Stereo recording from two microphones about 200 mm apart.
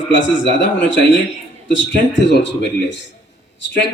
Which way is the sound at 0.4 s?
65° left (ahead or behind).